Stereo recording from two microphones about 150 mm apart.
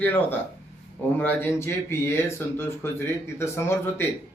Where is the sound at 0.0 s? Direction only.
15° left (ahead or behind).